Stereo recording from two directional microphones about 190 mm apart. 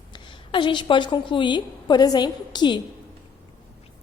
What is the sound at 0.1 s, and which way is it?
A woman's voice, 25° left (ahead or behind).